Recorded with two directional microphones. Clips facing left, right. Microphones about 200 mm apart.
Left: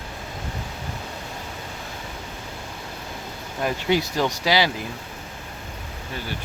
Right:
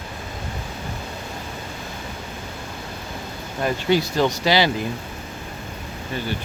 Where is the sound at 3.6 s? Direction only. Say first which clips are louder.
Right 2 dB; 15° left (ahead or behind).